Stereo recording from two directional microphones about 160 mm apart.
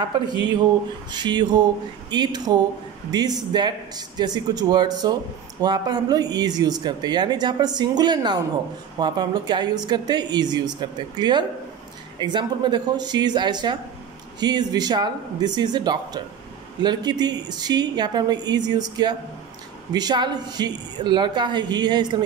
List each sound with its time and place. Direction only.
1.1 s speech: 25° right (ahead or behind)